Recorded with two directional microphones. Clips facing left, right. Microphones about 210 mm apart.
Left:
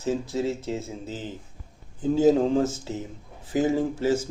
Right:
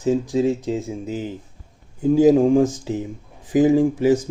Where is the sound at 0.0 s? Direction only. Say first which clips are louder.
Right 7 dB; 15° right (ahead or behind).